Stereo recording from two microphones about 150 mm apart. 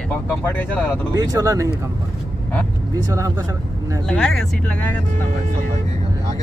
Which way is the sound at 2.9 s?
20° right (ahead or behind).